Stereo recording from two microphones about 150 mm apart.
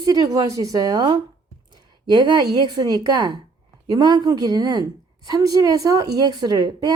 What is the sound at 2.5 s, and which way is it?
Speech, 30° right (ahead or behind).